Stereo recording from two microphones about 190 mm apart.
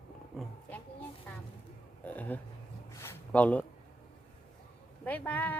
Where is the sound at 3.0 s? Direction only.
10° left (ahead or behind).